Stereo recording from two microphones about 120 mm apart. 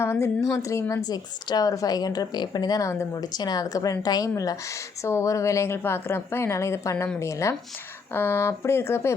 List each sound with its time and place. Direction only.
0.0 s a woman's voice: 20° left (ahead or behind)